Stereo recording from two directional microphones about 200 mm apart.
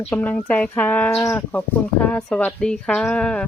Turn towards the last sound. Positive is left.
turn(degrees=5)  # may be behind; listen again after turning